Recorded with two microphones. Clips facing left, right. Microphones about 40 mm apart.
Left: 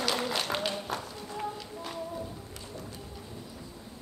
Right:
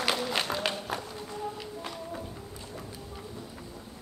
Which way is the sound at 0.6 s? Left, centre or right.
Right.